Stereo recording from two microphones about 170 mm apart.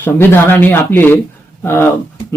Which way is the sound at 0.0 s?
15° left (ahead or behind).